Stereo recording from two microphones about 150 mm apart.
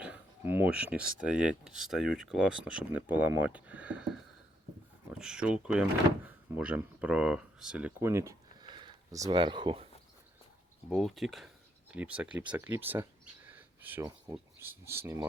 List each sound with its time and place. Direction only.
0.0 s speech: 10° right (ahead or behind); by 9.9 s 35° right (ahead or behind)
10.8 s speech: centre (ahead or behind); by 15.3 s 20° right (ahead or behind)